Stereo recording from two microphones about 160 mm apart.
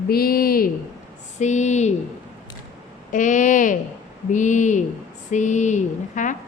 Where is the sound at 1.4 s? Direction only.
45° left (ahead or behind).